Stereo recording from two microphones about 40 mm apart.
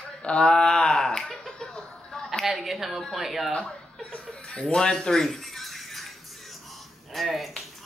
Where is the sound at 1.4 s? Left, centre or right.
Centre.